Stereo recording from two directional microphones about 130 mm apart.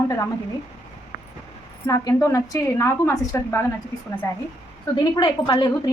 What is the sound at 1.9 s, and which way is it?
A woman's voice, 25° left (ahead or behind).